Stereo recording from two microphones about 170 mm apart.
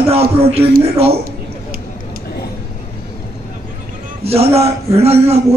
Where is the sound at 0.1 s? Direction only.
35° right (ahead or behind).